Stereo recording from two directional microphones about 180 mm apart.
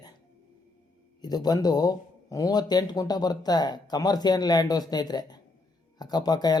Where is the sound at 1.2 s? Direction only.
20° left (ahead or behind).